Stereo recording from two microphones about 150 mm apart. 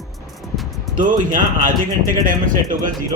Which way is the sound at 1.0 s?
60° right (ahead or behind).